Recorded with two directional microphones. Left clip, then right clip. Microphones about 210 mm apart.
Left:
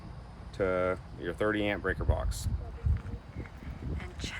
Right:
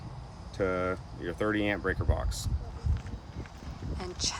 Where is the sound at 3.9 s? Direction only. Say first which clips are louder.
Right 8 dB; 15° right (ahead or behind).